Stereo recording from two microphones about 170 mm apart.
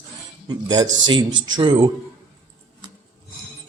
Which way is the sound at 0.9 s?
90° right.